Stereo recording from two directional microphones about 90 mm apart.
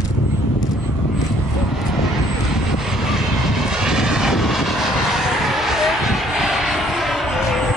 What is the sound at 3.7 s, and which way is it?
Vehicle, 5° right (ahead or behind).